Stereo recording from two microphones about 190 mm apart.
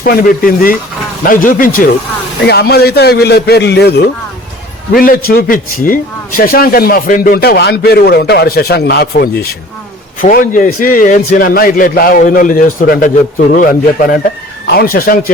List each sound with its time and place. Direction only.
0.0 s a man's voice: 50° left (ahead or behind)
2.4 s a man's voice: 60° left (ahead or behind)
4.9 s a man's voice: 50° left (ahead or behind)